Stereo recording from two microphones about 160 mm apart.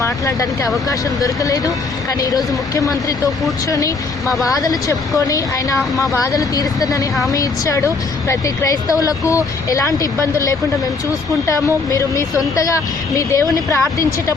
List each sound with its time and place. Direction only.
0.0 s a woman's voice: 20° left (ahead or behind)